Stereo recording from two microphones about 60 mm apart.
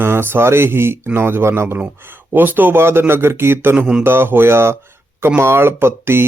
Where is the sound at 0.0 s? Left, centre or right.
Right.